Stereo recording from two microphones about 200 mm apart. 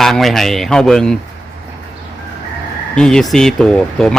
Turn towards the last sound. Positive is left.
turn(degrees=5)  # may be behind; listen again after turning